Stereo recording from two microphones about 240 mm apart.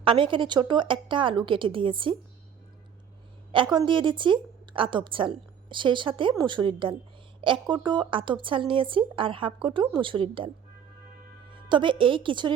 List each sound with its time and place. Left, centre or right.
0.0 s a woman's voice: right
3.5 s a woman's voice: centre
11.5 s a woman's voice: right